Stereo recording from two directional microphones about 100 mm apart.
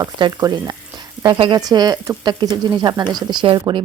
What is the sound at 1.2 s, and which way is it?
Speech, 50° right (ahead or behind).